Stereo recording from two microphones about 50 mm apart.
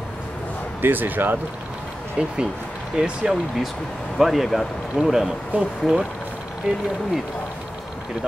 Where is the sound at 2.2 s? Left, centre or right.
Centre.